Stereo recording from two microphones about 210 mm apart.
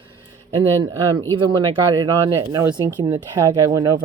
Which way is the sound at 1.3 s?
25° right (ahead or behind).